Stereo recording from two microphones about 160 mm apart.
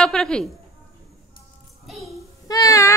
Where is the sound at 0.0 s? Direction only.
5° left (ahead or behind).